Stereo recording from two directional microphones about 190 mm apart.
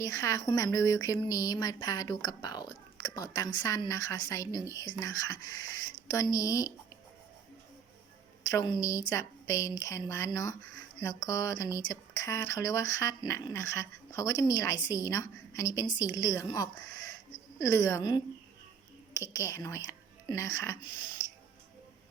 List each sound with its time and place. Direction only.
0.0 s speech: 15° left (ahead or behind)
8.4 s speech: 20° left (ahead or behind)